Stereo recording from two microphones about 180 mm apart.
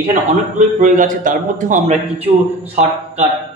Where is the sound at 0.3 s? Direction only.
45° right (ahead or behind).